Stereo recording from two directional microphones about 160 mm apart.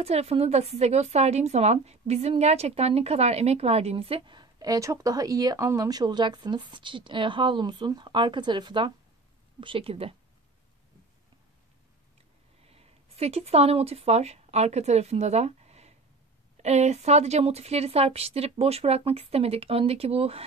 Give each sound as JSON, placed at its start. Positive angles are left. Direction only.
{"t": 0.0, "sound": "speech", "side_deg": -40}
{"t": 12.6, "sound": "speech", "side_deg": -40}